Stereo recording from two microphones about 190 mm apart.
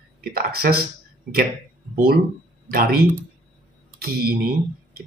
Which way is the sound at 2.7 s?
55° right (ahead or behind).